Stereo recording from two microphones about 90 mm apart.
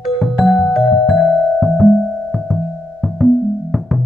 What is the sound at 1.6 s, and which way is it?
Music, centre (ahead or behind).